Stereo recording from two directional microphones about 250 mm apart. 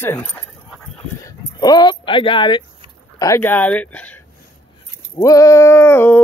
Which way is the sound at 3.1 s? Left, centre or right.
Centre.